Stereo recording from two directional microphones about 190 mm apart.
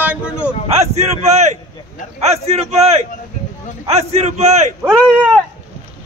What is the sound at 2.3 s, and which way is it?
A man's voice, 35° right (ahead or behind).